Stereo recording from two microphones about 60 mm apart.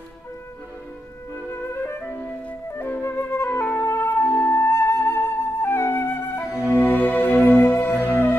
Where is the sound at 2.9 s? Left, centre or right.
Left.